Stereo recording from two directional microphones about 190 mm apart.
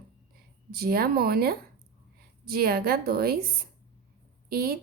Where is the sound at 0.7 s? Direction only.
50° right (ahead or behind).